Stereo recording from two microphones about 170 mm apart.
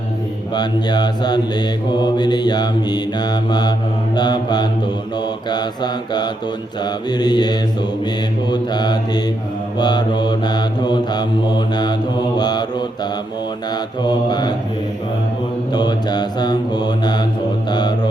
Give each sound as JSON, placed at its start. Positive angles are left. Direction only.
{"t": 0.5, "sound": "mantra", "side_deg": 25}
{"t": 14.3, "sound": "mantra", "side_deg": 25}
{"t": 15.7, "sound": "mantra", "side_deg": 25}
{"t": 17.7, "sound": "music", "side_deg": 25}